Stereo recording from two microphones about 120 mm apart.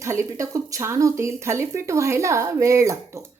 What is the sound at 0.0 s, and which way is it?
Speech, 25° right (ahead or behind).